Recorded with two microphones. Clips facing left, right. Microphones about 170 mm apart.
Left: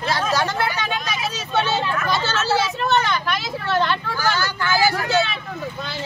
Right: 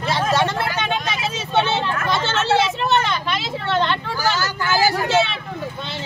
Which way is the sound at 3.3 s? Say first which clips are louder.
Right 1 dB; 25° right (ahead or behind).